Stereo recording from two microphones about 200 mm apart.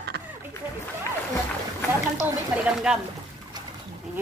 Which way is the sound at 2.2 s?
5° right (ahead or behind).